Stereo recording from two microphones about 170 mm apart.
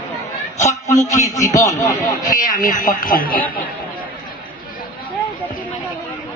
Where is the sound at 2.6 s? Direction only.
50° left (ahead or behind).